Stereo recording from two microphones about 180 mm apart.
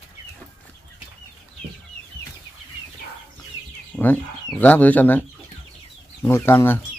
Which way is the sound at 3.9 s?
10° left (ahead or behind).